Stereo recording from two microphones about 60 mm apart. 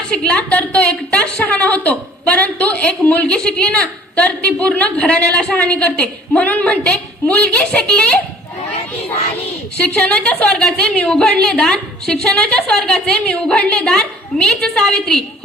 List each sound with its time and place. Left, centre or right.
0.1 s a woman's voice: centre
9.8 s a woman's voice: centre